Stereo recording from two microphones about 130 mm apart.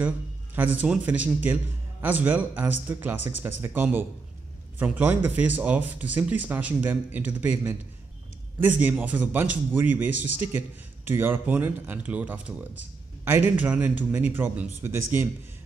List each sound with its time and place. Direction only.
0.6 s speech: 10° right (ahead or behind)